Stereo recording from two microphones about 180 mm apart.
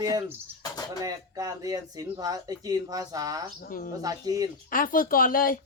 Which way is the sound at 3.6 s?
50° left (ahead or behind).